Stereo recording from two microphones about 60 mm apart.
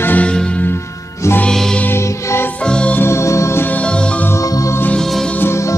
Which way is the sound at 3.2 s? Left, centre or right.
Left.